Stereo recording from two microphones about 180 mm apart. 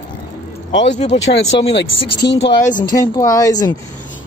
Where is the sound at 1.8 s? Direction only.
70° left (ahead or behind).